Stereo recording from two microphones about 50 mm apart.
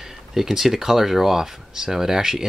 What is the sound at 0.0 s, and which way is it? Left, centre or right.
Speech, centre.